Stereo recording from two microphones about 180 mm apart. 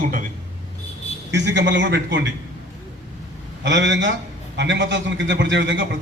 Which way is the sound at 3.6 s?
80° right.